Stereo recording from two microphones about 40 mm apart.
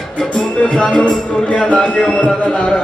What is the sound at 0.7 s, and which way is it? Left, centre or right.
Speech, left.